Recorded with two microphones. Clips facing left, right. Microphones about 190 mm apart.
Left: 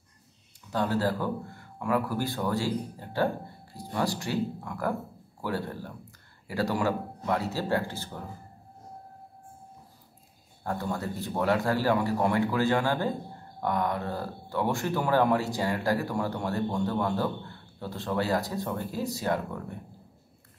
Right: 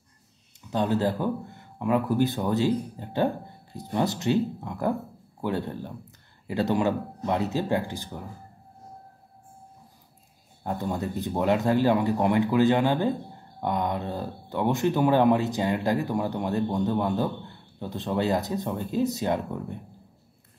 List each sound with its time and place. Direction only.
0.7 s speech: 20° right (ahead or behind)
10.6 s speech: 20° right (ahead or behind)